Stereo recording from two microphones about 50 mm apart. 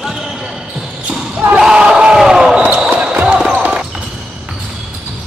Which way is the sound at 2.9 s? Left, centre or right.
Right.